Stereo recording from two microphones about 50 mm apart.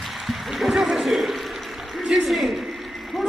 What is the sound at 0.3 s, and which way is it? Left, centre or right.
A man's voice, centre.